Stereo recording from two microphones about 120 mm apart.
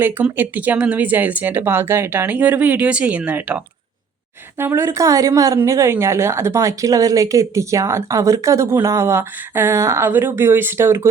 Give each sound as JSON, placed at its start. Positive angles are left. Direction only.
{"t": 0.0, "sound": "a woman's voice", "side_deg": -15}